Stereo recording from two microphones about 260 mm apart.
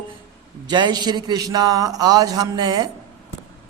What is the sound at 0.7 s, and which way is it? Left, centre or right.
A man's voice, centre.